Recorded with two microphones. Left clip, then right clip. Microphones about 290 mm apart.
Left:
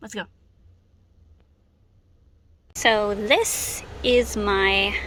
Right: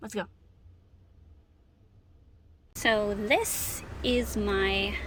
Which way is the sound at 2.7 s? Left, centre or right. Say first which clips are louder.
Left 6 dB; centre.